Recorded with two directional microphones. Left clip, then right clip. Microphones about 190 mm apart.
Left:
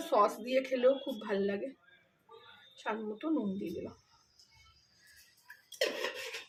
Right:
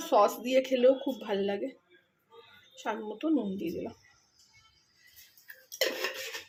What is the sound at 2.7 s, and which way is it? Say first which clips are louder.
Speech: right 3 dB; 25° right (ahead or behind).